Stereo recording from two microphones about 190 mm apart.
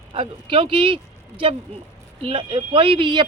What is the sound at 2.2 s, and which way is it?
A woman's voice, 30° right (ahead or behind).